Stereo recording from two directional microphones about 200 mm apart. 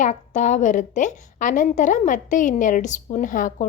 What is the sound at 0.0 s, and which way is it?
A woman's voice, 35° left (ahead or behind).